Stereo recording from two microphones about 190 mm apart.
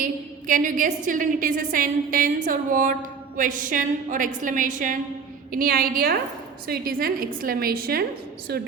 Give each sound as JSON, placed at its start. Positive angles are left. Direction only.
{"t": 0.0, "sound": "a woman's voice", "side_deg": -45}